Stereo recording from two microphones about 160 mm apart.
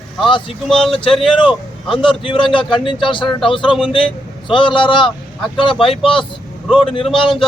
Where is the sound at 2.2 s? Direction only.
30° left (ahead or behind).